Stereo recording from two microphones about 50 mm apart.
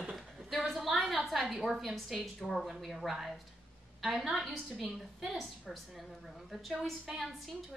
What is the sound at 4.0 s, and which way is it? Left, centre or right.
A woman's voice, centre.